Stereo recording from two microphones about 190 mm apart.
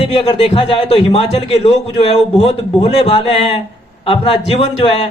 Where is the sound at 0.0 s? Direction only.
30° left (ahead or behind).